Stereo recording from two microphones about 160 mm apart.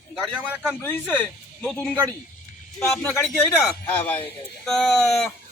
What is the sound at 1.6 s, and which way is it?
Speech, 5° left (ahead or behind).